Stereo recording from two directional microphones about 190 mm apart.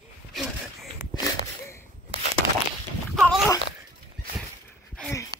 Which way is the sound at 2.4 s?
25° left (ahead or behind).